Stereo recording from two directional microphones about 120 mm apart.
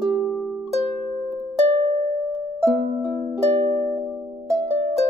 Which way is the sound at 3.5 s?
55° right (ahead or behind).